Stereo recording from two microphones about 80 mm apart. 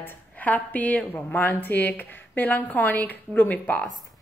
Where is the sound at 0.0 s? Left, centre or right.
Centre.